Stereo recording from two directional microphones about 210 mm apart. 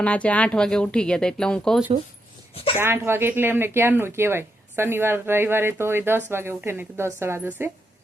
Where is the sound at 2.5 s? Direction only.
25° left (ahead or behind).